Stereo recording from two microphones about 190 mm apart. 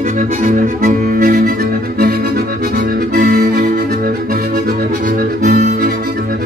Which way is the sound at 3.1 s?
55° right (ahead or behind).